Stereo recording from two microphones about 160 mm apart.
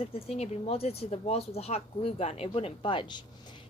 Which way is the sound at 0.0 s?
40° left (ahead or behind).